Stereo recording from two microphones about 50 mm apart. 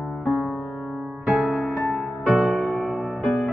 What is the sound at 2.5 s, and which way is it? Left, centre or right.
Music, left.